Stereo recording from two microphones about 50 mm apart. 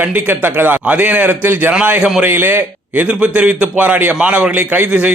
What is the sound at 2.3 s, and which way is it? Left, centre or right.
Speech, right.